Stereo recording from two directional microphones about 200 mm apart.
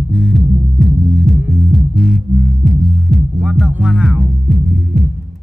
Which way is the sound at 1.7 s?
50° right (ahead or behind).